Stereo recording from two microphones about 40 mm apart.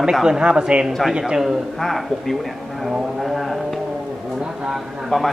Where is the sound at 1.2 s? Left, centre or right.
Centre.